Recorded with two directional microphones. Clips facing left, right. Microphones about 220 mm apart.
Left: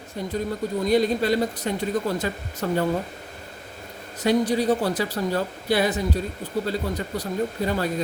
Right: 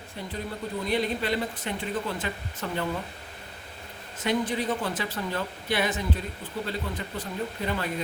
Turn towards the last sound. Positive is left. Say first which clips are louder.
# left 6 dB
turn(degrees=40)  # may be behind; listen again after turning